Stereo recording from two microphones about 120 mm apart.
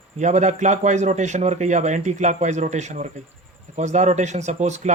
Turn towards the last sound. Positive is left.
turn(degrees=-75)  # may be behind; listen again after turning